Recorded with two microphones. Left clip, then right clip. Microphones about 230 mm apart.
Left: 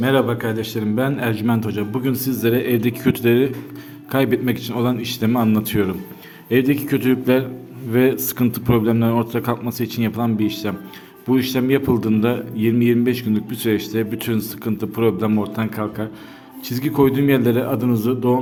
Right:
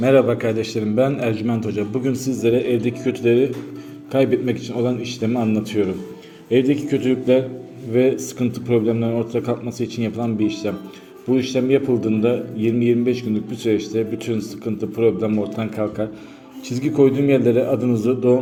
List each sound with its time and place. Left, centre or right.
0.0 s a man's voice: centre
7.9 s a man's voice: left